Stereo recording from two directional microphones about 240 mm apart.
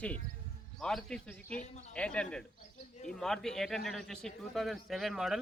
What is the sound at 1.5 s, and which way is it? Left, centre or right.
Speech, left.